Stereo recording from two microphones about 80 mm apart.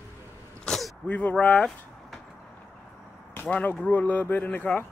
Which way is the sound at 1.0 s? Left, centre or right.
Centre.